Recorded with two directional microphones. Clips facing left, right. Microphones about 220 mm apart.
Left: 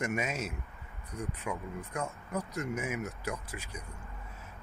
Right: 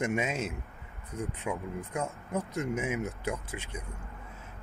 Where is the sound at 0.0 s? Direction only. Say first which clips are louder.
Right 3 dB; 25° right (ahead or behind).